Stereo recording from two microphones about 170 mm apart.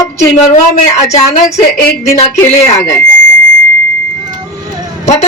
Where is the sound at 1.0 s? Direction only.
40° left (ahead or behind).